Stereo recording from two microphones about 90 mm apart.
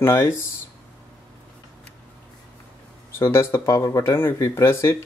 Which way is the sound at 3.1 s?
30° left (ahead or behind).